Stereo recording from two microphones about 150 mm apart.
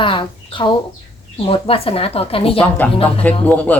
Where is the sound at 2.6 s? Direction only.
10° left (ahead or behind).